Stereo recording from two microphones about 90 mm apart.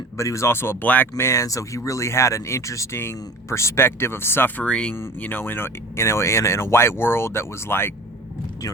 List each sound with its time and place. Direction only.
0.2 s speech: 35° left (ahead or behind)
1.1 s speech: 35° left (ahead or behind)